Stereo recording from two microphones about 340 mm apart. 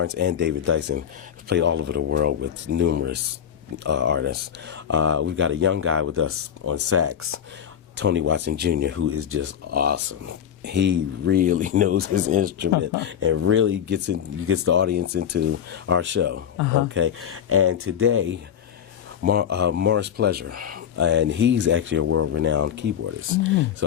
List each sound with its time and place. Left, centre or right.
0.0 s speech: right